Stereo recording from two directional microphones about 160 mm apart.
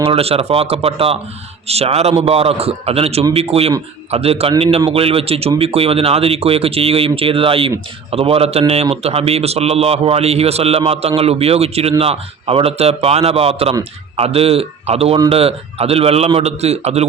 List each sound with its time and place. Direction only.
0.0 s a man's voice: 40° right (ahead or behind)